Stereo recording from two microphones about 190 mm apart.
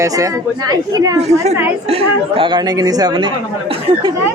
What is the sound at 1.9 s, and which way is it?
A man's voice, 30° right (ahead or behind).